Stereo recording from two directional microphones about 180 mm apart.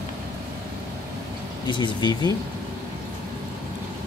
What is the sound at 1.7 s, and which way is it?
Speech, 25° left (ahead or behind).